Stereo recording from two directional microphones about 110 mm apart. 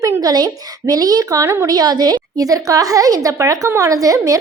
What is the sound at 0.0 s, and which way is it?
A woman's voice, 30° right (ahead or behind).